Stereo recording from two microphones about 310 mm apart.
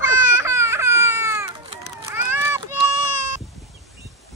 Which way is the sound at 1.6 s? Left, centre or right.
Centre.